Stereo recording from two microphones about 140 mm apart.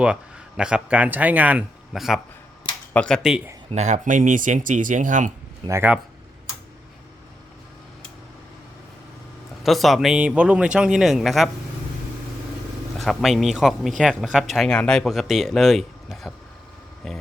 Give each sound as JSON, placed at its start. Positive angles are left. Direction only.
{"t": 0.0, "sound": "speech", "side_deg": -5}
{"t": 3.2, "sound": "speech", "side_deg": -5}
{"t": 3.7, "sound": "speech", "side_deg": -55}
{"t": 5.6, "sound": "speech", "side_deg": -20}
{"t": 9.6, "sound": "speech", "side_deg": 0}
{"t": 13.0, "sound": "speech", "side_deg": 0}